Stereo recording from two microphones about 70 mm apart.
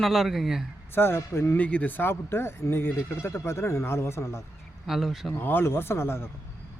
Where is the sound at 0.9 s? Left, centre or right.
Left.